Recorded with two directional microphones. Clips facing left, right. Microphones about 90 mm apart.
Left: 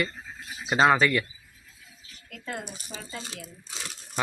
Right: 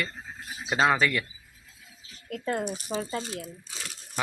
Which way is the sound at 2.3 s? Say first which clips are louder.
Right 7 dB; 40° right (ahead or behind).